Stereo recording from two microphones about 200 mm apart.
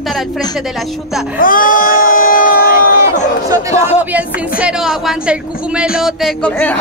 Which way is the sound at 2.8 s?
35° left (ahead or behind).